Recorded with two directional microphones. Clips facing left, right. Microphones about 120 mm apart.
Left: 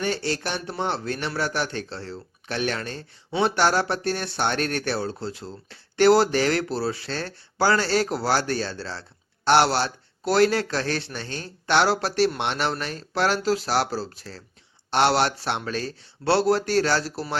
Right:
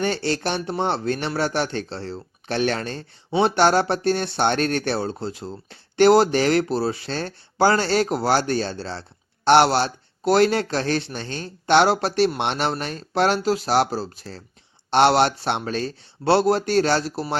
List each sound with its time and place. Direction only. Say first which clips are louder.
0.0 s speech: right 3 dB; 25° right (ahead or behind)